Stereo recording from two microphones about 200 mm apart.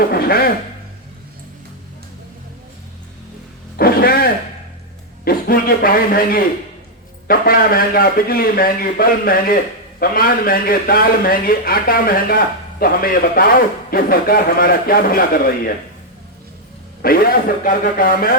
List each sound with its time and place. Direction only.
0.0 s a man's voice: 50° left (ahead or behind)
3.8 s a sound: 50° left (ahead or behind)
7.3 s a man's voice: 45° left (ahead or behind)
17.0 s a man's voice: 45° left (ahead or behind)